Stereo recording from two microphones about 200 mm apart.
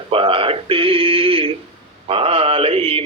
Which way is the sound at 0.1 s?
25° right (ahead or behind).